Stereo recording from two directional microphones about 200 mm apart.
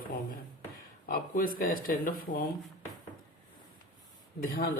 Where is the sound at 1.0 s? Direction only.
45° left (ahead or behind).